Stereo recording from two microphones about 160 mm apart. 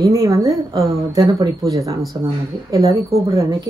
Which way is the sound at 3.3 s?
20° right (ahead or behind).